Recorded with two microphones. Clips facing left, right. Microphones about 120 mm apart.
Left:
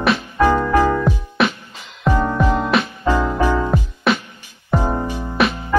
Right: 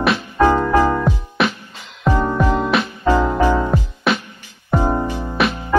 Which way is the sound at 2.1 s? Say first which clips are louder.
Even; 15° right (ahead or behind).